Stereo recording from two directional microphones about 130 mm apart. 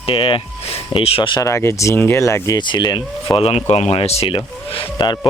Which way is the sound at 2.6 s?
35° left (ahead or behind).